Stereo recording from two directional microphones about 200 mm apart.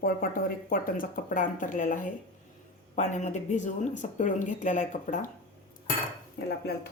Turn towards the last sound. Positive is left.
turn(degrees=50)  # may be behind; listen again after turning